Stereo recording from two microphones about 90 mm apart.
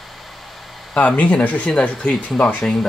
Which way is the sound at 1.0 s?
15° left (ahead or behind).